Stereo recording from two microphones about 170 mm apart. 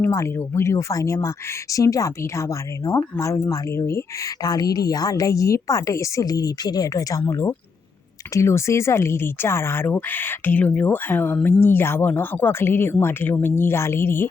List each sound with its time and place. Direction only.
0.0 s a woman's voice: 15° left (ahead or behind)